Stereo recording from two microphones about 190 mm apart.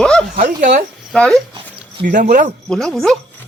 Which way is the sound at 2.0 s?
45° right (ahead or behind).